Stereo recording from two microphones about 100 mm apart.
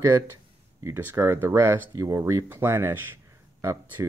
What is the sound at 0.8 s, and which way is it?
Speech, 25° right (ahead or behind).